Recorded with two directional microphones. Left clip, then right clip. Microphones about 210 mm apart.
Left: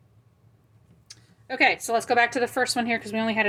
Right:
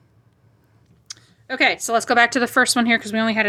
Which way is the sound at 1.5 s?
15° right (ahead or behind).